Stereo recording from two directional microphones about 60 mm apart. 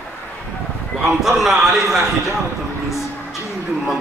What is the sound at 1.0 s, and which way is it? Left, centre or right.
A man's voice, centre.